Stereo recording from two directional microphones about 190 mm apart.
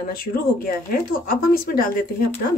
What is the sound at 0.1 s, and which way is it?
Speech, 50° left (ahead or behind).